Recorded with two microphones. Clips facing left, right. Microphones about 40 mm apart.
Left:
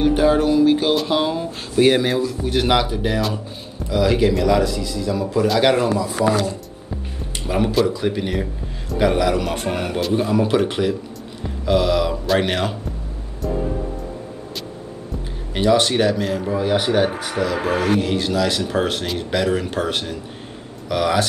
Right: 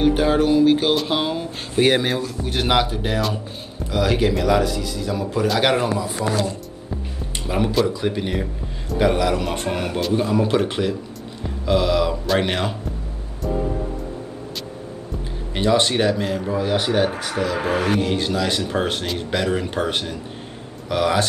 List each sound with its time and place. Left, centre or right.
0.0 s music: centre
0.7 s speech: centre
5.9 s speech: right
6.9 s speech: centre
15.5 s speech: centre